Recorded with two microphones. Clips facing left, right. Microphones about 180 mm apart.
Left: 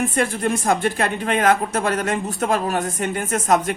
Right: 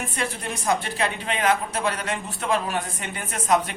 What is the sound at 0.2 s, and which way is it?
A woman's voice, 50° left (ahead or behind).